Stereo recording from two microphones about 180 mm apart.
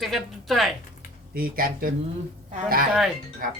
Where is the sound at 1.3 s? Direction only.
55° right (ahead or behind).